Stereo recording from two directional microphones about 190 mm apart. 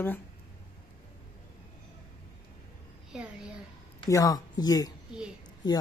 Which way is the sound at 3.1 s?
5° right (ahead or behind).